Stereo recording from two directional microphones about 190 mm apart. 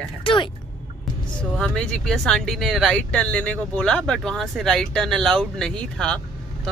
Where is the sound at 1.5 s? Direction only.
5° left (ahead or behind).